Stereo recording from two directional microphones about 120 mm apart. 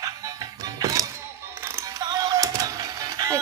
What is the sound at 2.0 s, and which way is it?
Music, 35° right (ahead or behind).